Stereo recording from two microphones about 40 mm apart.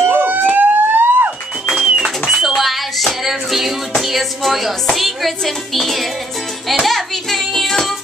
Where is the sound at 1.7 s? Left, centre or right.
Centre.